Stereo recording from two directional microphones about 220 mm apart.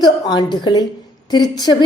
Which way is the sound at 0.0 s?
20° left (ahead or behind).